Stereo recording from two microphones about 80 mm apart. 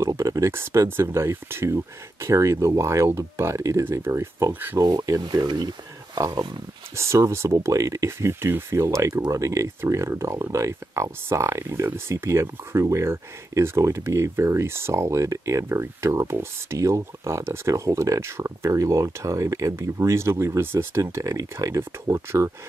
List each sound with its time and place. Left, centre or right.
0.0 s speech: right
4.7 s speech: right
7.0 s speech: right